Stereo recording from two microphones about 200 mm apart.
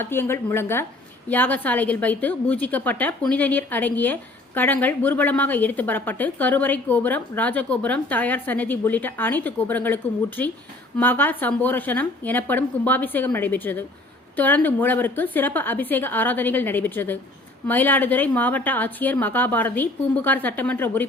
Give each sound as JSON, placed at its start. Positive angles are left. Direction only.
{"t": 0.0, "sound": "a woman's voice", "side_deg": 10}